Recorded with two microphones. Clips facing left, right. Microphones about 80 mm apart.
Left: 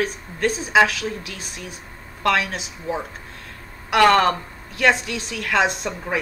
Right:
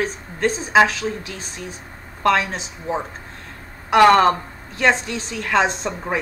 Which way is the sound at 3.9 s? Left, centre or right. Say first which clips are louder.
Right 3 dB; centre.